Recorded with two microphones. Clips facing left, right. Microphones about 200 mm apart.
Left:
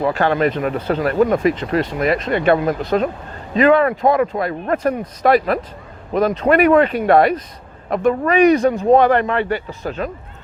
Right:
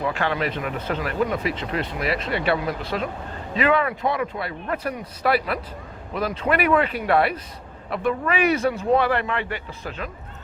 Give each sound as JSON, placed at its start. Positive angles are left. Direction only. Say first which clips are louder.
{"t": 0.0, "sound": "speech", "louder": "left 8 dB", "side_deg": 40}